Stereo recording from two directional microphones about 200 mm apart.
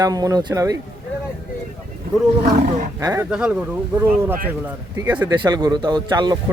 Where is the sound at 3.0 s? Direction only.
15° right (ahead or behind).